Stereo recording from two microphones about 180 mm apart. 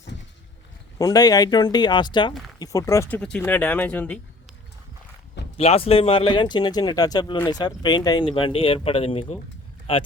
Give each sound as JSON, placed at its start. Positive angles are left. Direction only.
{"t": 0.9, "sound": "speech", "side_deg": 20}
{"t": 5.5, "sound": "speech", "side_deg": 35}